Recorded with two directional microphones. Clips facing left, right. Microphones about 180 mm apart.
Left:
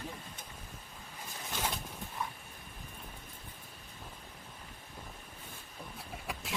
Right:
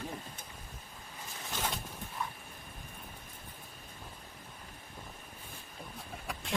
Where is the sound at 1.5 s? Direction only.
5° left (ahead or behind).